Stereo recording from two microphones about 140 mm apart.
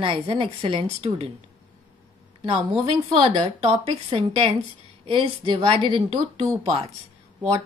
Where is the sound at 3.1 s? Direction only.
35° right (ahead or behind).